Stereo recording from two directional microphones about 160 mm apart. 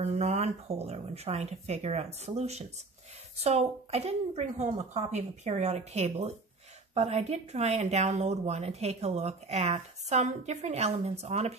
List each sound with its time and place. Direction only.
0.0 s speech: 40° right (ahead or behind)